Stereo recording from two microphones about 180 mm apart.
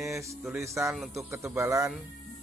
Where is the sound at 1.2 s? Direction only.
15° right (ahead or behind).